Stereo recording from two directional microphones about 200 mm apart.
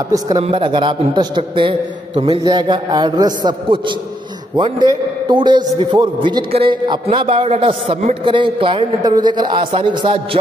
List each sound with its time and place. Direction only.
0.4 s a man's voice: 25° right (ahead or behind)